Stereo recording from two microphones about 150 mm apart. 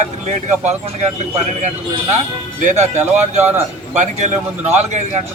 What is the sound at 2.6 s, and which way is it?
Speech, 50° right (ahead or behind).